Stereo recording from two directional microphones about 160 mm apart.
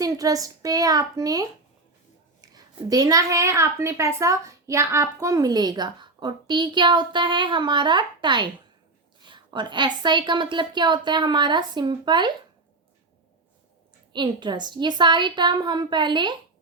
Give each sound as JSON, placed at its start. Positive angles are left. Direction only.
{"t": 0.0, "sound": "a woman's voice", "side_deg": -20}
{"t": 14.1, "sound": "a woman's voice", "side_deg": -30}